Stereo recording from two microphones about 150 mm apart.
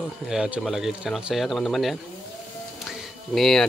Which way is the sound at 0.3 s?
5° right (ahead or behind).